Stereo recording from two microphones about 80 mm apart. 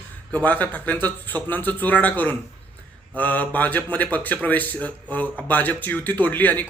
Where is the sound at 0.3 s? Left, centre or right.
Centre.